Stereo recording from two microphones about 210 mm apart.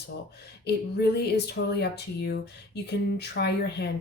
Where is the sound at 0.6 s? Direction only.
50° left (ahead or behind).